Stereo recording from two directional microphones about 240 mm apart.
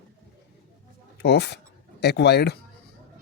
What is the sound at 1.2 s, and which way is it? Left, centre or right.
Speech, left.